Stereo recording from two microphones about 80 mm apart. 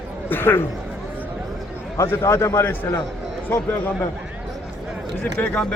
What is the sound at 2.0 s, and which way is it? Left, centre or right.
A man's voice, left.